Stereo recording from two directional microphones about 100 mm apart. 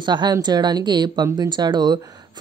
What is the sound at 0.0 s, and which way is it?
A woman's voice, 50° right (ahead or behind).